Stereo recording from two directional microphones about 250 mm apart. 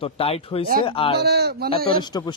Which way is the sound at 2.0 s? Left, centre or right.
Centre.